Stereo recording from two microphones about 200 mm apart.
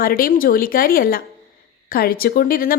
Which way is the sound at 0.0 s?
45° left (ahead or behind).